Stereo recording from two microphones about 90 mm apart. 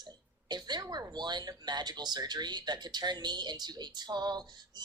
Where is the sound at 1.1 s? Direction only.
55° right (ahead or behind).